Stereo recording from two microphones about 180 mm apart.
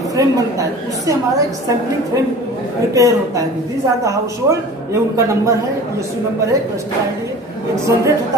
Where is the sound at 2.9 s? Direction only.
20° right (ahead or behind).